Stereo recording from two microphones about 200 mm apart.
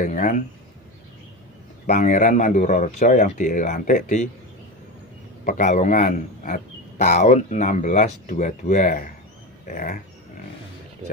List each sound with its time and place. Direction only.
0.0 s a man's voice: 40° left (ahead or behind)
1.9 s a man's voice: 40° left (ahead or behind)
5.4 s a man's voice: 40° left (ahead or behind)